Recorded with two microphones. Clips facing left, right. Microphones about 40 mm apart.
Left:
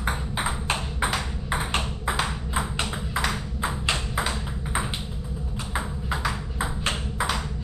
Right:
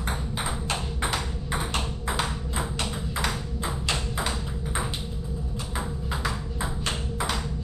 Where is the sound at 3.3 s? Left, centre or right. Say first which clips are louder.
Left 2 dB; centre.